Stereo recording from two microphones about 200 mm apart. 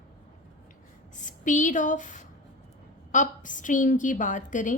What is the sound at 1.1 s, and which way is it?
A woman's voice, 40° left (ahead or behind).